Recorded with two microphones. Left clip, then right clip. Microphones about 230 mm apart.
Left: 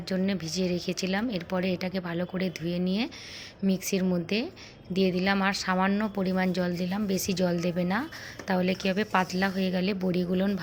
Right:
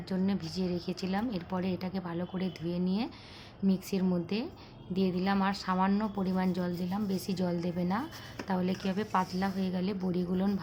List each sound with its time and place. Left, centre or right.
0.1 s speech: centre